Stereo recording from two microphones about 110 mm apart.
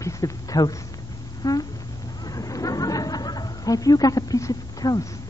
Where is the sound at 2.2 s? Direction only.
30° left (ahead or behind).